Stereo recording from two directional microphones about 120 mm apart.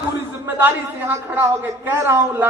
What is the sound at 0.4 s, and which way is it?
A man's voice, 15° right (ahead or behind).